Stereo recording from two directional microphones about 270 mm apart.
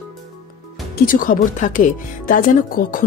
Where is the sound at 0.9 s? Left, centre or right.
Left.